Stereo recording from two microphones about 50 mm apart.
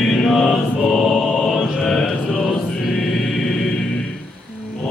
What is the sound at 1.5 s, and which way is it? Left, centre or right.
Music, centre.